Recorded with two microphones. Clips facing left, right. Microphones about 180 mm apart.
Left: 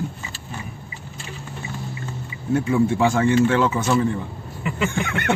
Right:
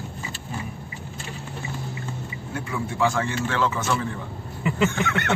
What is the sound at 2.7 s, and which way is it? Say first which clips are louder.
Speech: left 5 dB; 25° left (ahead or behind).